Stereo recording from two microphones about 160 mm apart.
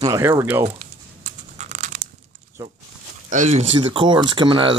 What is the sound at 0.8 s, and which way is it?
Crumpling, 45° right (ahead or behind).